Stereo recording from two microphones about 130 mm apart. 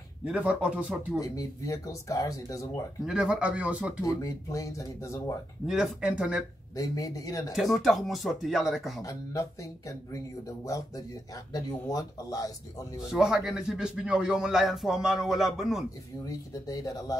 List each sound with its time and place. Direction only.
0.2 s speech: 10° right (ahead or behind)
1.2 s speech: 25° left (ahead or behind)
3.1 s speech: 5° right (ahead or behind)
4.0 s speech: 25° left (ahead or behind)
5.7 s a man's voice: 5° right (ahead or behind)
6.7 s speech: 25° left (ahead or behind)
7.5 s a man's voice: centre (ahead or behind)
9.0 s speech: 25° left (ahead or behind)
13.0 s a man's voice: 5° right (ahead or behind)
16.3 s speech: 25° left (ahead or behind)